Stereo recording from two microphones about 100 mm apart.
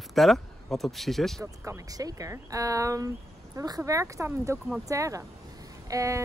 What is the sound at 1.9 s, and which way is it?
Speech, 35° right (ahead or behind).